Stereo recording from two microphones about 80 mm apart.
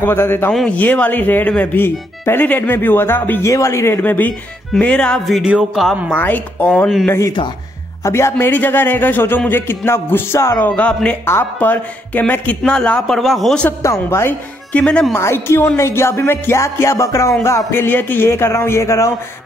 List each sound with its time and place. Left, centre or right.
0.0 s speech: left
3.4 s a man's voice: left; by 5.2 s centre
5.2 s a man's voice: centre
6.1 s speech: left
7.1 s speech: left
10.8 s a man's voice: centre
11.2 s a man's voice: left
13.1 s a man's voice: centre
13.8 s speech: left
14.7 s a man's voice: centre
15.1 s speech: left